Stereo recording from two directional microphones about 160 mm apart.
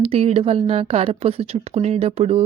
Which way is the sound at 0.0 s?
35° right (ahead or behind).